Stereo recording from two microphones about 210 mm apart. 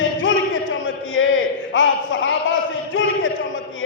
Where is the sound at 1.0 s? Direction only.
65° left (ahead or behind).